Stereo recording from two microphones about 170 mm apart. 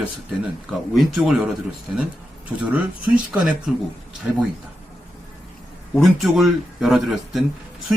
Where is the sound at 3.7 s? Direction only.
Centre (ahead or behind).